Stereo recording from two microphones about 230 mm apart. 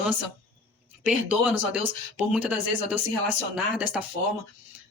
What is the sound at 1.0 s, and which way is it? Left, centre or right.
Speech, centre.